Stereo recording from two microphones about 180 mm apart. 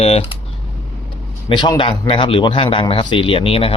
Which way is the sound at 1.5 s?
25° left (ahead or behind).